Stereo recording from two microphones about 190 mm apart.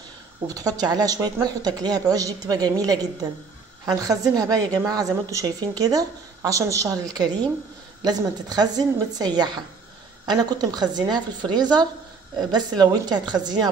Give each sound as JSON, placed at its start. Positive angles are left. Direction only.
{"t": 0.6, "sound": "a woman's voice", "side_deg": -20}